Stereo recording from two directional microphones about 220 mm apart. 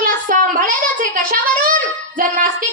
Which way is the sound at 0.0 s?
40° right (ahead or behind).